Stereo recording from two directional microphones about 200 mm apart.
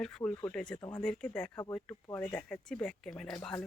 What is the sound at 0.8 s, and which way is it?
Speech, 20° left (ahead or behind).